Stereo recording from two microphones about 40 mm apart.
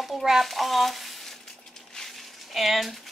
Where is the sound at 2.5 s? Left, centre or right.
Centre.